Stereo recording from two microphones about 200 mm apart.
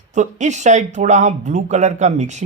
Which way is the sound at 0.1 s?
35° right (ahead or behind).